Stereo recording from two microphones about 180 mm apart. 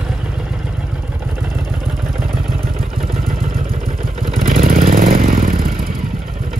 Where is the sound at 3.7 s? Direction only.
45° right (ahead or behind).